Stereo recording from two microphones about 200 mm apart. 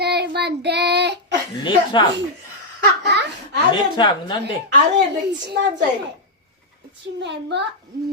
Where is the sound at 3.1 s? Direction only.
60° right (ahead or behind).